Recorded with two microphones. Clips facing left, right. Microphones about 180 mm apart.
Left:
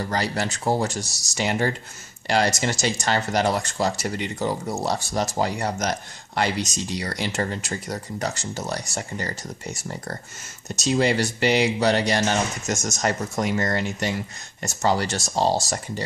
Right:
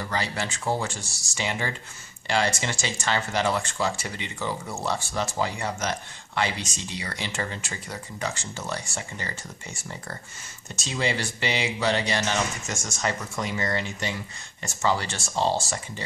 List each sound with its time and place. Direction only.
0.0 s speech: 40° left (ahead or behind)